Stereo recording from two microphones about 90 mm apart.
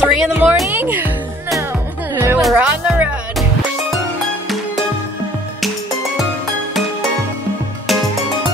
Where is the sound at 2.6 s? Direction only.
15° right (ahead or behind).